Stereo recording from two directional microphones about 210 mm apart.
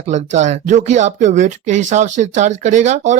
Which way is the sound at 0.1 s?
35° right (ahead or behind).